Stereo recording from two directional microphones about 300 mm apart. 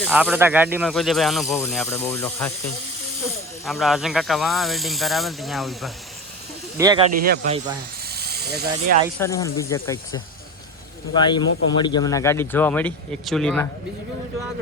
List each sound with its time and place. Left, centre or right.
0.0 s speech: centre
3.7 s speech: centre
6.7 s speech: centre
7.2 s speech: right
8.1 s snake: right
9.1 s speech: centre